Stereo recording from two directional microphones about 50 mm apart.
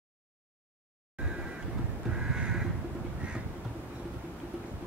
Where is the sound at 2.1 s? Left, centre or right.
Centre.